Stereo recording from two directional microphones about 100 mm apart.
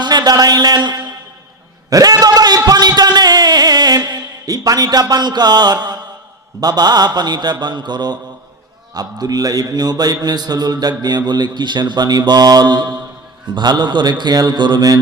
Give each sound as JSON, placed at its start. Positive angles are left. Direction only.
{"t": 0.0, "sound": "speech", "side_deg": -45}
{"t": 1.9, "sound": "a sound", "side_deg": -40}
{"t": 6.6, "sound": "speech", "side_deg": -45}